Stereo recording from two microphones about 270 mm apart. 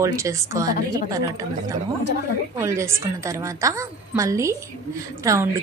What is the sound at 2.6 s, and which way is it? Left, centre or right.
A woman's voice, centre.